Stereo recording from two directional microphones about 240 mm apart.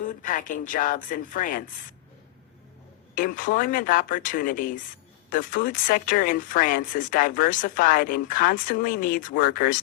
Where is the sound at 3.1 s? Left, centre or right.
Left.